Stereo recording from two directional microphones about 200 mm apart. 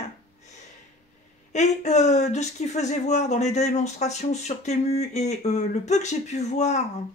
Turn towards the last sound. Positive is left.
turn(degrees=35)  # may be behind; listen again after turning